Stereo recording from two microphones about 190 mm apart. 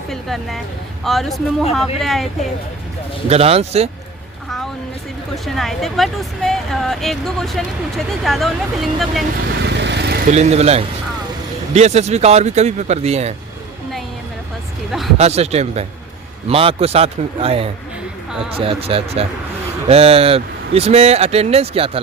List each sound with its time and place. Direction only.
0.1 s speech: centre (ahead or behind)
3.2 s speech: 35° right (ahead or behind)
5.5 s speech: centre (ahead or behind)
9.6 s vehicle: 65° right (ahead or behind)
10.2 s speech: 35° right (ahead or behind)
15.2 s speech: 35° right (ahead or behind)